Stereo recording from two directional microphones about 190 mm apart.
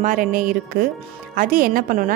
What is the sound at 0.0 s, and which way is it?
A woman's voice, 45° right (ahead or behind).